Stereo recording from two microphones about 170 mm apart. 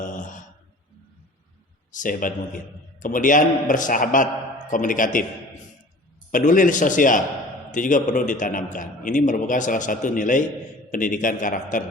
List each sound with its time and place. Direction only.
0.0 s a sound: 50° left (ahead or behind)
1.9 s a man's voice: 50° left (ahead or behind)
6.3 s a man's voice: 50° left (ahead or behind)